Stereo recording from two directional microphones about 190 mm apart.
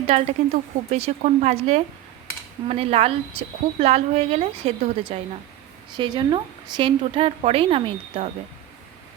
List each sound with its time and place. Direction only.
0.1 s a woman's voice: 35° right (ahead or behind)